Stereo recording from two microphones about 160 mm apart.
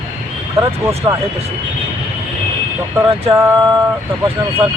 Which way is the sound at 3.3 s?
20° right (ahead or behind).